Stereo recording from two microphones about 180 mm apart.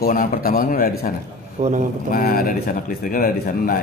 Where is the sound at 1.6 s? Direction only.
40° right (ahead or behind).